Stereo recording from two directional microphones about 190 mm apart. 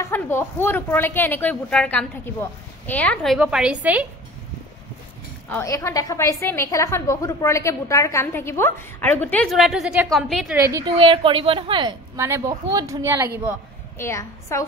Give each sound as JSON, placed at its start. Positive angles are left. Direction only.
{"t": 0.0, "sound": "a woman's voice", "side_deg": 10}
{"t": 5.5, "sound": "a woman's voice", "side_deg": 15}
{"t": 10.6, "sound": "speech", "side_deg": -15}
{"t": 11.0, "sound": "a woman's voice", "side_deg": -25}
{"t": 12.2, "sound": "speech", "side_deg": -15}
{"t": 13.9, "sound": "a woman's voice", "side_deg": 15}